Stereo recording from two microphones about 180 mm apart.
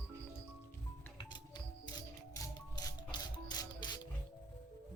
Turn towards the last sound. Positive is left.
turn(degrees=25)  # may be behind; listen again after turning